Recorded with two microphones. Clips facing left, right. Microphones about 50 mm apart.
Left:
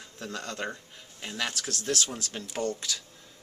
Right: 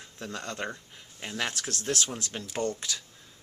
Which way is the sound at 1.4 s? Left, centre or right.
Right.